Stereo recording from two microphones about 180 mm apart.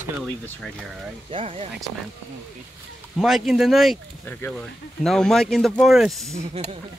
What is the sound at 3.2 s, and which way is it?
Speech, centre (ahead or behind).